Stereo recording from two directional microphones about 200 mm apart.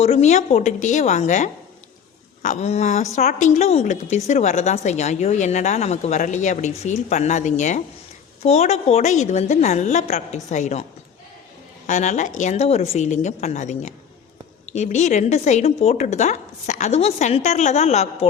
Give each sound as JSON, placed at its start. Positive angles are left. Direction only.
{"t": 0.0, "sound": "a woman's voice", "side_deg": 30}
{"t": 11.9, "sound": "a woman's voice", "side_deg": 35}